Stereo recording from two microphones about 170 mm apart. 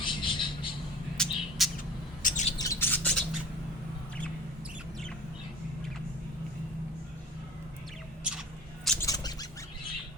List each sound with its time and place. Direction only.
0.0 s vehicle: 30° left (ahead or behind)
1.1 s bird: centre (ahead or behind)
2.2 s bird: 45° left (ahead or behind)
2.6 s bird: 15° left (ahead or behind)
8.2 s a sound: centre (ahead or behind)
9.0 s bird: 20° left (ahead or behind)